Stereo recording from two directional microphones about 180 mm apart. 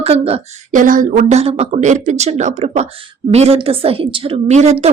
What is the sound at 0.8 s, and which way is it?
Speech, 45° right (ahead or behind).